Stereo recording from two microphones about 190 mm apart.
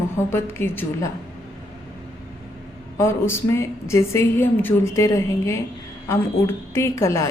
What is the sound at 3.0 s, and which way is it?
A woman's voice, 15° left (ahead or behind).